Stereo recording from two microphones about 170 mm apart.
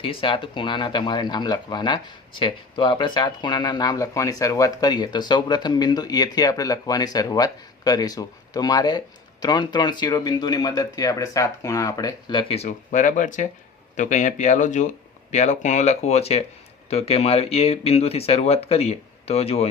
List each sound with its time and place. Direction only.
0.0 s speech: 30° left (ahead or behind)